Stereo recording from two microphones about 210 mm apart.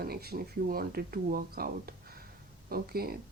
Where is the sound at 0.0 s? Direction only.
45° right (ahead or behind).